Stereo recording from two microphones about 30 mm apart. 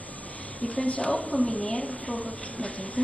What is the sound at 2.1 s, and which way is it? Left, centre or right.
Speech, left.